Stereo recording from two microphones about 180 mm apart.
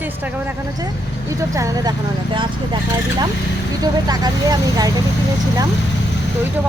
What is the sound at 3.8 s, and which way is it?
Speech, 20° right (ahead or behind).